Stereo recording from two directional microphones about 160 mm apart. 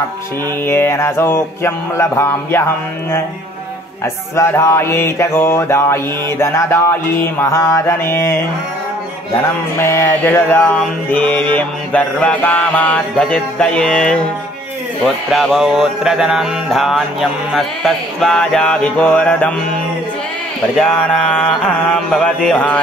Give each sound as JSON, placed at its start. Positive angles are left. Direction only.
{"t": 0.7, "sound": "mantra", "side_deg": 15}
{"t": 4.0, "sound": "mantra", "side_deg": 15}
{"t": 9.8, "sound": "mantra", "side_deg": 15}
{"t": 15.0, "sound": "music", "side_deg": 0}
{"t": 20.7, "sound": "music", "side_deg": 5}